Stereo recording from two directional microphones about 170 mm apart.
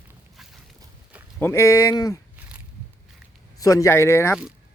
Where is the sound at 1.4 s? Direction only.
15° left (ahead or behind).